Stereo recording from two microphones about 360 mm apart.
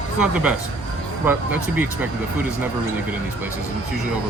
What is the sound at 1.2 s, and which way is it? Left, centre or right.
Speech, centre.